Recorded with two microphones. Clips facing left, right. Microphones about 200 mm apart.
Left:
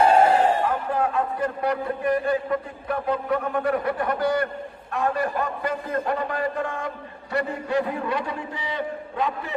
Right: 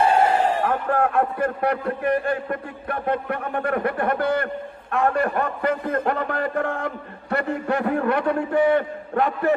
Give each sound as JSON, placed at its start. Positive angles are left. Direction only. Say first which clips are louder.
{"t": 0.6, "sound": "a man's voice", "louder": "right 2 dB", "side_deg": -55}